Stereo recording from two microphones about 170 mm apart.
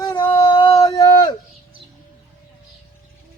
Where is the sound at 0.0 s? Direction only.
20° left (ahead or behind).